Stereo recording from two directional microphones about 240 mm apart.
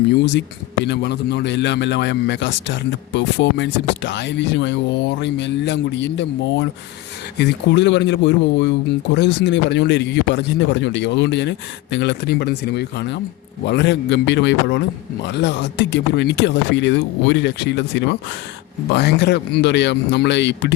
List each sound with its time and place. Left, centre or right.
0.9 s speech: left